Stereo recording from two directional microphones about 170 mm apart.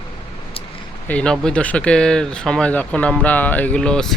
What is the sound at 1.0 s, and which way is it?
Speech, 5° left (ahead or behind).